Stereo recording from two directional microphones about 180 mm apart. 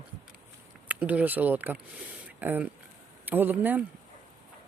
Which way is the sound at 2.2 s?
10° right (ahead or behind).